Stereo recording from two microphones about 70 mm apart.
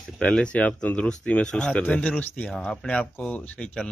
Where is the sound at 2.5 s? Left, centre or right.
Centre.